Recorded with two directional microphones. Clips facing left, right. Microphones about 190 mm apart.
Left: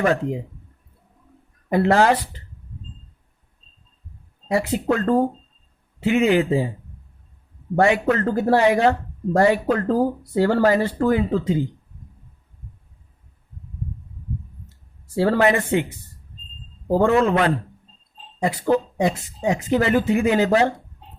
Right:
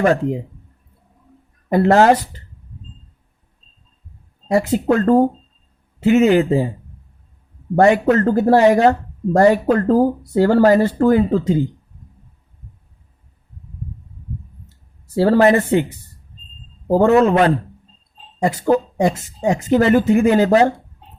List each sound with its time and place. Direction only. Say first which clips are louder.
0.0 s speech: right 4 dB; 45° right (ahead or behind)
1.7 s speech: right 4 dB; 45° right (ahead or behind)
4.4 s speech: right 5 dB; 45° right (ahead or behind)
7.8 s speech: right 5 dB; 45° right (ahead or behind)
15.1 s speech: right 5 dB; 35° right (ahead or behind)